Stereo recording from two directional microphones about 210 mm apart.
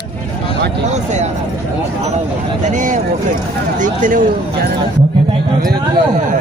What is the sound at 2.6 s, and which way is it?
Speech, 35° right (ahead or behind).